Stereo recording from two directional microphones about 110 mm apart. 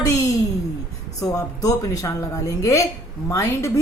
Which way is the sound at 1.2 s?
30° left (ahead or behind).